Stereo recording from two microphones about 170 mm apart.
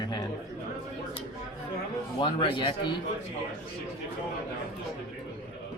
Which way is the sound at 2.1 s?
25° left (ahead or behind).